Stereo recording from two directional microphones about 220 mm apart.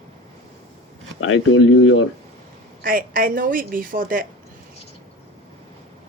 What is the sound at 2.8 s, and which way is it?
Speech, 40° right (ahead or behind).